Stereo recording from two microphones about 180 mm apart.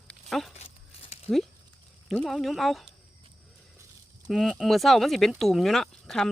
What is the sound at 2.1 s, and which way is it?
Speech, centre (ahead or behind).